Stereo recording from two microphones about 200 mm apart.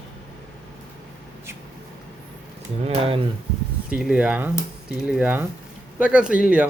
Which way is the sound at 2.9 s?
30° right (ahead or behind).